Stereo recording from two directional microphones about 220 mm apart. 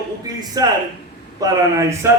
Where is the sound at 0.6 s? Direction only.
15° right (ahead or behind).